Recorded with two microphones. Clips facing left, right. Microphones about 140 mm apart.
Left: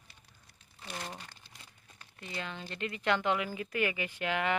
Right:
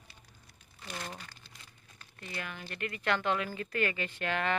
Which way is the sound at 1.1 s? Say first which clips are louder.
Even; 25° left (ahead or behind).